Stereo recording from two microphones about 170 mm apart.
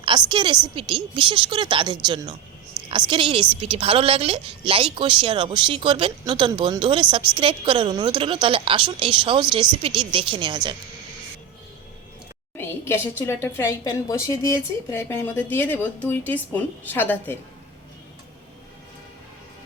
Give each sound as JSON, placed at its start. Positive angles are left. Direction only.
{"t": 0.0, "sound": "a woman's voice", "side_deg": -25}
{"t": 2.8, "sound": "a sound", "side_deg": -5}
{"t": 3.1, "sound": "a woman's voice", "side_deg": -30}
{"t": 12.5, "sound": "a woman's voice", "side_deg": 15}